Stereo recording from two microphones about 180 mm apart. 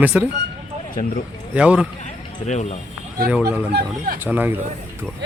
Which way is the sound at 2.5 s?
40° left (ahead or behind).